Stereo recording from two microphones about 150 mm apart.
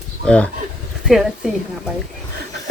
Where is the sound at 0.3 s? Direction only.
10° left (ahead or behind).